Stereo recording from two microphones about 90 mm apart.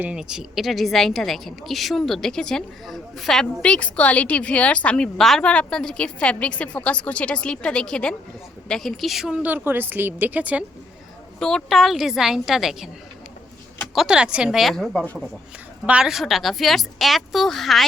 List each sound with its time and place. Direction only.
0.0 s a woman's voice: 10° right (ahead or behind)
9.5 s speech: 25° right (ahead or behind)
11.3 s a woman's voice: 5° left (ahead or behind)
13.9 s a woman's voice: 5° right (ahead or behind)
15.9 s a woman's voice: 10° right (ahead or behind)